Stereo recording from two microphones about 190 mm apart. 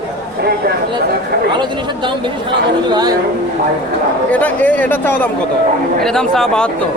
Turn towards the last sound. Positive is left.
turn(degrees=5)  # may be behind; listen again after turning